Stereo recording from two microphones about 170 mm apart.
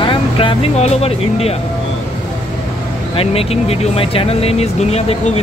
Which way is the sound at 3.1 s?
35° left (ahead or behind).